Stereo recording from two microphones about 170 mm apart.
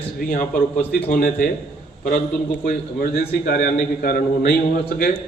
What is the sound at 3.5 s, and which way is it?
A man's voice, 60° left (ahead or behind).